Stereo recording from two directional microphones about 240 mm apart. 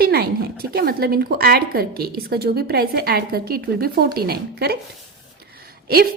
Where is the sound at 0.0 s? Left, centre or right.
Right.